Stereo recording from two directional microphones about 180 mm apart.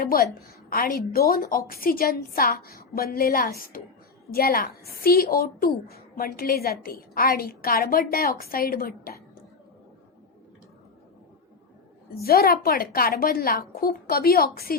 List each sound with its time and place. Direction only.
0.0 s a woman's voice: 55° left (ahead or behind)
12.2 s a woman's voice: 55° left (ahead or behind)